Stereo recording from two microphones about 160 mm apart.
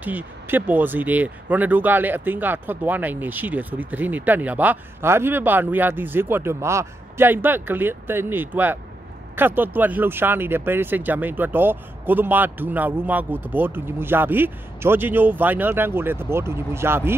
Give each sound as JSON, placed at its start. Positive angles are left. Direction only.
{"t": 0.0, "sound": "speech", "side_deg": -10}